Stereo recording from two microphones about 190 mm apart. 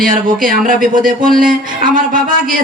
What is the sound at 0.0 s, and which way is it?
A man's voice, 45° right (ahead or behind).